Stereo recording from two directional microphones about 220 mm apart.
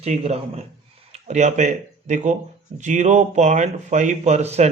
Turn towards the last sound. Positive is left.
turn(degrees=-30)  # may be behind; listen again after turning